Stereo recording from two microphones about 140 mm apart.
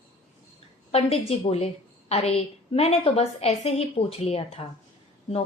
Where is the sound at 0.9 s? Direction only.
45° left (ahead or behind).